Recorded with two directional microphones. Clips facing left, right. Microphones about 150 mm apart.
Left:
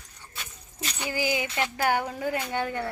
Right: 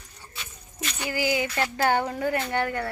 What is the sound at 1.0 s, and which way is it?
Speech, 20° left (ahead or behind).